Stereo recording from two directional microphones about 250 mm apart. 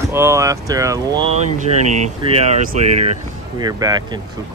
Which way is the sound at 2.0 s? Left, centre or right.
Right.